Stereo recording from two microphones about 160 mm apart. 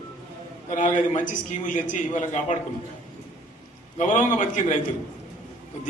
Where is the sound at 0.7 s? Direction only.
50° left (ahead or behind).